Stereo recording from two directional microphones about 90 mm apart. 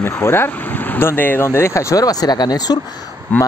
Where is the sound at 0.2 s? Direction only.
25° left (ahead or behind); by 2.8 s 45° left (ahead or behind).